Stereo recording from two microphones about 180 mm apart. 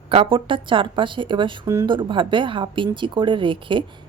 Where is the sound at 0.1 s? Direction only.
30° right (ahead or behind).